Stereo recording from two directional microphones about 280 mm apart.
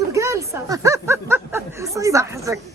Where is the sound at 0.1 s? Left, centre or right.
Centre.